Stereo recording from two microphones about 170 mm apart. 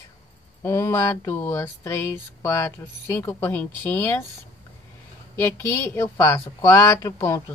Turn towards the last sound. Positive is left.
turn(degrees=15)  # may be behind; listen again after turning